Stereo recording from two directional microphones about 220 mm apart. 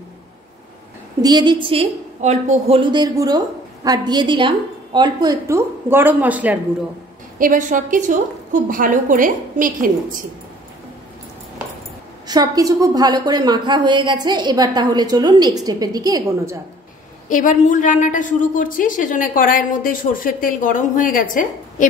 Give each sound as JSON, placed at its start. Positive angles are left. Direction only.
{"t": 1.2, "sound": "a woman's voice", "side_deg": -20}
{"t": 7.3, "sound": "a woman's voice", "side_deg": -40}
{"t": 12.3, "sound": "a woman's voice", "side_deg": -15}
{"t": 17.3, "sound": "a woman's voice", "side_deg": 35}